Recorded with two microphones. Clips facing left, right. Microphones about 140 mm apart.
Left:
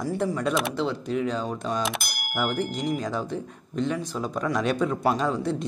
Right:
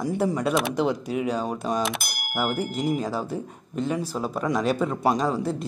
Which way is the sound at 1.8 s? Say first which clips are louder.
Right 1 dB; centre (ahead or behind).